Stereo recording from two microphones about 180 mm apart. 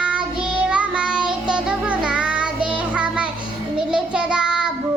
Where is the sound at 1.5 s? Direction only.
5° right (ahead or behind).